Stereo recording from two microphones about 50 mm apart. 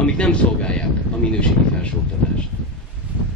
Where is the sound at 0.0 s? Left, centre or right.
Left.